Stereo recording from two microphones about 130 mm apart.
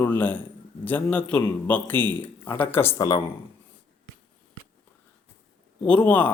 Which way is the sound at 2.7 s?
15° left (ahead or behind).